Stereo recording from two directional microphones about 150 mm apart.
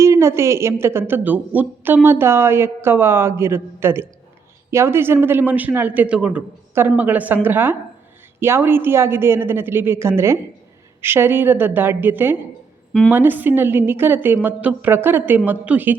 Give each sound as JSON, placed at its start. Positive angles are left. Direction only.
{"t": 0.0, "sound": "speech", "side_deg": -20}